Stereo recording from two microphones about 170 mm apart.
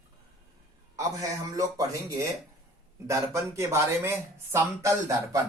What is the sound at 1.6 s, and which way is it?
Speech, 20° right (ahead or behind).